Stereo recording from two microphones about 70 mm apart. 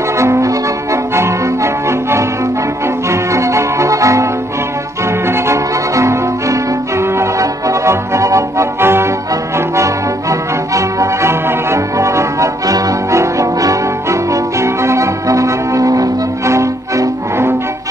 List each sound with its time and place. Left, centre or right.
0.2 s music: right
10.7 s music: right